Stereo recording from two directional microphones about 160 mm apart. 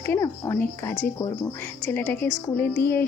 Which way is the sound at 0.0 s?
15° left (ahead or behind).